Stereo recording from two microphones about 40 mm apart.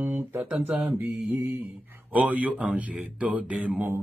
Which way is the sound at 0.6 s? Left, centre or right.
Right.